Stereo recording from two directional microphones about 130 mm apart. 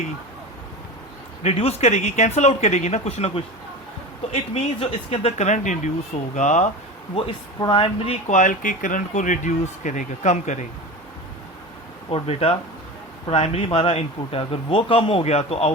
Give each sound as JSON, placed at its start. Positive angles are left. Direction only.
{"t": 1.4, "sound": "speech", "side_deg": 55}
{"t": 7.6, "sound": "speech", "side_deg": 40}
{"t": 8.3, "sound": "speech", "side_deg": 85}
{"t": 12.1, "sound": "speech", "side_deg": 50}